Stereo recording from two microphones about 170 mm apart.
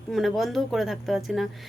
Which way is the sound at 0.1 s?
Centre (ahead or behind).